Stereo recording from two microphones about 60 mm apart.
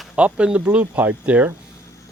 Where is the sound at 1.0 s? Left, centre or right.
Right.